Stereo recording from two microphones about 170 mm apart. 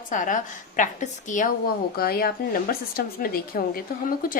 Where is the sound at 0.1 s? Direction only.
50° left (ahead or behind).